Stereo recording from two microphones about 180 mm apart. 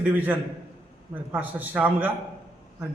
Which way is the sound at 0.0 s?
10° right (ahead or behind).